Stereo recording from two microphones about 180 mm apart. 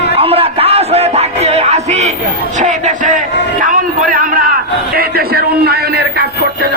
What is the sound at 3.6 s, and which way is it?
A man's voice, 50° right (ahead or behind).